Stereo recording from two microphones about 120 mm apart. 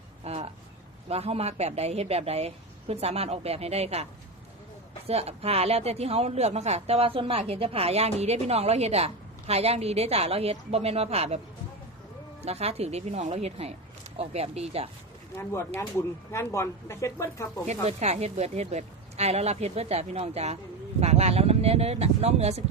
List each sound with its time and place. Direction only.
0.3 s a sound: 60° right (ahead or behind)
1.0 s speech: 55° right (ahead or behind)
5.0 s speech: 60° right (ahead or behind)
12.4 s speech: 60° right (ahead or behind)
15.4 s speech: 20° left (ahead or behind)
17.7 s speech: 65° right (ahead or behind)